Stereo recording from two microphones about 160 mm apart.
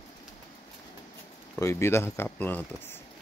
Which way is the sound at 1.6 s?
15° left (ahead or behind).